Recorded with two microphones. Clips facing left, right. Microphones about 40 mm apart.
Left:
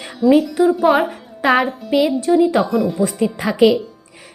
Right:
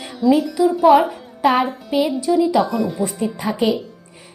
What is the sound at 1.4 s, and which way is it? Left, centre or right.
Speech, left.